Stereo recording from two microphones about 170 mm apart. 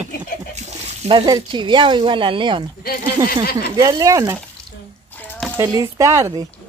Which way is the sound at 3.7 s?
25° right (ahead or behind).